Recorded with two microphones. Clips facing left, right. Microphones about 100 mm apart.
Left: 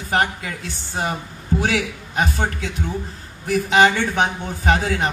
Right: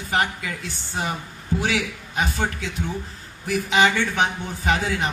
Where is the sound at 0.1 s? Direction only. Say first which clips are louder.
Left 3 dB; 45° left (ahead or behind).